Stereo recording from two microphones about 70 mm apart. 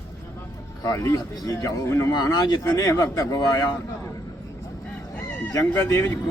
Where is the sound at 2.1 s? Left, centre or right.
Left.